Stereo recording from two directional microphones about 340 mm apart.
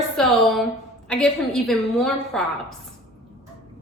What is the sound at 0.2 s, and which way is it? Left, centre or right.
A woman's voice, centre.